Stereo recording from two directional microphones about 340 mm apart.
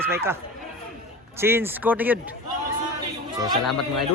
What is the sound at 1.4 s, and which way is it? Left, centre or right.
Speech, centre.